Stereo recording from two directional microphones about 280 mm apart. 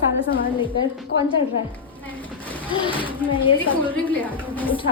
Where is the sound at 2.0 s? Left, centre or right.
Centre.